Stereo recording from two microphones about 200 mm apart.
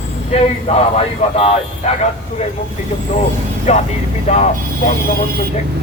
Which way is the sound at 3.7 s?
35° left (ahead or behind).